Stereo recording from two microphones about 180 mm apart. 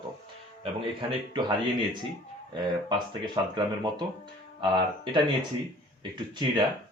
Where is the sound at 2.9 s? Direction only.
25° right (ahead or behind).